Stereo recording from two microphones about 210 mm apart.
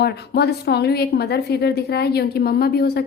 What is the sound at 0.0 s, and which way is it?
A woman's voice, 50° left (ahead or behind).